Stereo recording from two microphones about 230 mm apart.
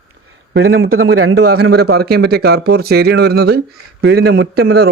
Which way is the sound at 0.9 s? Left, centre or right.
Right.